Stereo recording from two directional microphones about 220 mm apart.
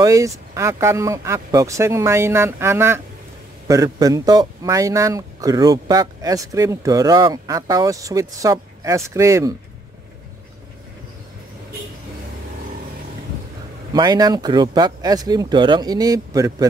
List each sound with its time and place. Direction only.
0.0 s a man's voice: 15° right (ahead or behind)
13.9 s a man's voice: 20° right (ahead or behind)